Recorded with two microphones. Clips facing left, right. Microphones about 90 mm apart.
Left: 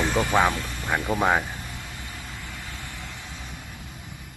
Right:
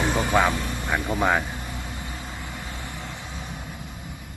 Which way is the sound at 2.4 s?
20° right (ahead or behind).